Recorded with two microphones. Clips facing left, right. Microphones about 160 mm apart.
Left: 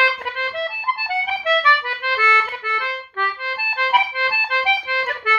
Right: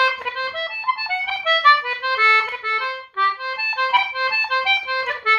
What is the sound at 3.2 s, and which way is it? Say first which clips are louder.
Accordion: right 2 dB; 50° left (ahead or behind).